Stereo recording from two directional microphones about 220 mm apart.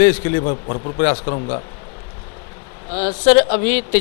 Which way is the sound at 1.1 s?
30° left (ahead or behind).